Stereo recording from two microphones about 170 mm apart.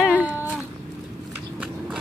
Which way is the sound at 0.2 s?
10° right (ahead or behind).